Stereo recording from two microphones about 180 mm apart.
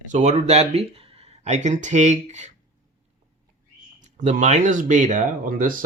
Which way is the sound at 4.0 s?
45° right (ahead or behind).